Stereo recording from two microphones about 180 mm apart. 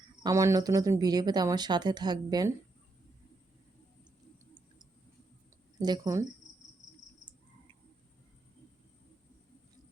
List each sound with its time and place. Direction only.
0.2 s speech: 20° right (ahead or behind)
5.8 s speech: 20° right (ahead or behind)